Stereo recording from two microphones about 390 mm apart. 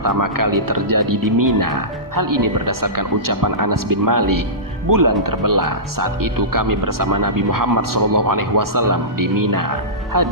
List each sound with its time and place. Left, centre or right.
0.0 s speech: right